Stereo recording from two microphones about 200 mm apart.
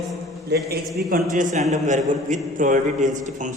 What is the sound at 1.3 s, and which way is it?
A man's voice, 40° right (ahead or behind).